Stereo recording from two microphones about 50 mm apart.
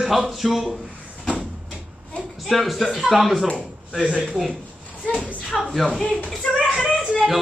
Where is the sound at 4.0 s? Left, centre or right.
Centre.